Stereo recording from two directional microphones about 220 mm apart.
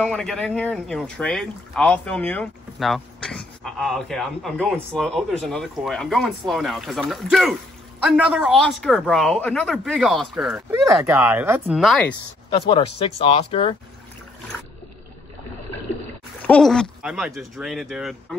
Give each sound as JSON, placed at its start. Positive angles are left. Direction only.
{"t": 0.0, "sound": "speech", "side_deg": 5}
{"t": 12.4, "sound": "speech", "side_deg": 20}
{"t": 16.4, "sound": "speech", "side_deg": 5}